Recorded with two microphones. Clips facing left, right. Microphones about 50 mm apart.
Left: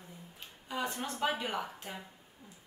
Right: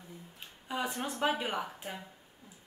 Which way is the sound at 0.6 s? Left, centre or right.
Centre.